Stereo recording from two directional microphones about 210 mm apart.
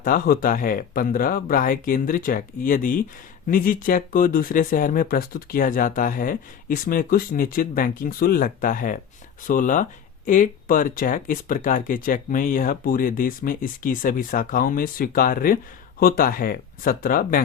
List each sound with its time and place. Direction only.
0.0 s speech: 45° left (ahead or behind)